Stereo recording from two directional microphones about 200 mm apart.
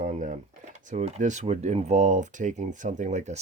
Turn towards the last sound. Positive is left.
turn(degrees=-35)  # may be behind; listen again after turning